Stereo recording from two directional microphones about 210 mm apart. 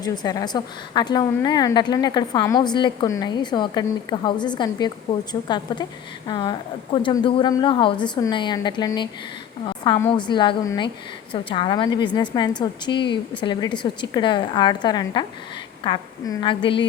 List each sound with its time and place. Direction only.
0.0 s a woman's voice: 20° left (ahead or behind)